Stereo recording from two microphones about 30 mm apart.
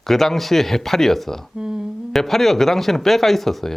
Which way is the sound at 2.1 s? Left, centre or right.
Centre.